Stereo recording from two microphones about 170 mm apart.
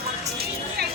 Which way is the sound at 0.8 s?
70° right (ahead or behind).